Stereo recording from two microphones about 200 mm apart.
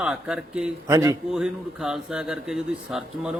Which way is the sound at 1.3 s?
5° right (ahead or behind).